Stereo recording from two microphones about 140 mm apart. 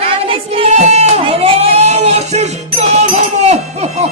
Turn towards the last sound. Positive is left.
turn(degrees=-50)  # may be behind; listen again after turning